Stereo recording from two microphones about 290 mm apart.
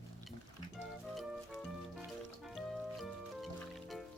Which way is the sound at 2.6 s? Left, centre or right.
Centre.